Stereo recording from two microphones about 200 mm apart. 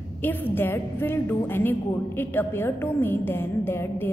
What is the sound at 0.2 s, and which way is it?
A woman's voice, 10° left (ahead or behind).